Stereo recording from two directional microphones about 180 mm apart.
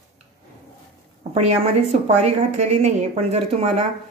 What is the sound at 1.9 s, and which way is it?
Speech, 40° right (ahead or behind).